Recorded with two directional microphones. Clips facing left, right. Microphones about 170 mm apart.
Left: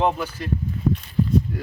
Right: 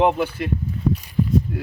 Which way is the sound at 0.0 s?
20° right (ahead or behind).